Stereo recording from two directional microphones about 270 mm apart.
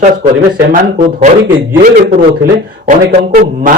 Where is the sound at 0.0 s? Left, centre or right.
Right.